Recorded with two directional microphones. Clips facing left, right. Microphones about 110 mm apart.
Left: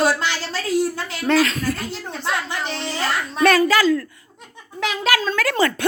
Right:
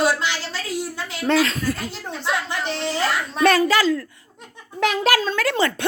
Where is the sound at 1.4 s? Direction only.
30° right (ahead or behind).